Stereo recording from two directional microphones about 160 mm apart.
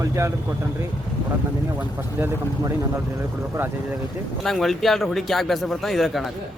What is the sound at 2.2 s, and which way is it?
A man's voice, 15° right (ahead or behind).